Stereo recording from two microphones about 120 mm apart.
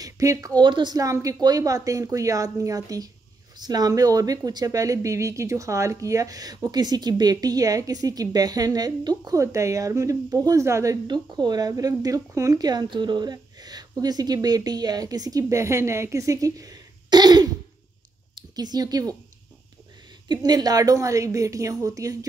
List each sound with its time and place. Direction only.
0.0 s a sound: 30° right (ahead or behind)
0.6 s speech: 40° right (ahead or behind)
11.1 s speech: 35° right (ahead or behind)
20.2 s speech: 35° right (ahead or behind)